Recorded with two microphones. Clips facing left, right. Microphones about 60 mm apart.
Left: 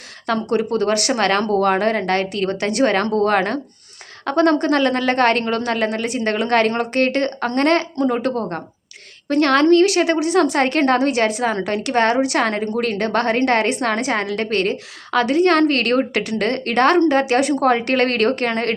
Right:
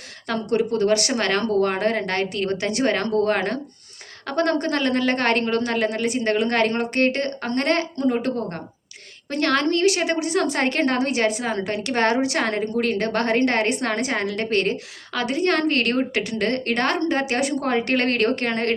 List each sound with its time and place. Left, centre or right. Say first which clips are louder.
0.7 s a woman's voice: left 2 dB; left